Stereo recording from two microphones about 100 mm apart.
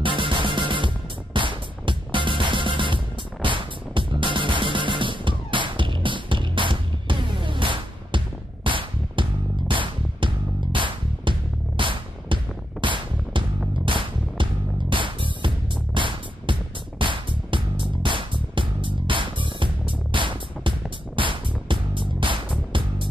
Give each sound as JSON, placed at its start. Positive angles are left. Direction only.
{"t": 0.0, "sound": "music", "side_deg": -55}